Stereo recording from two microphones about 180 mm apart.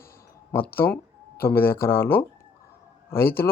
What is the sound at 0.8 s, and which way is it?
Speech, 15° left (ahead or behind).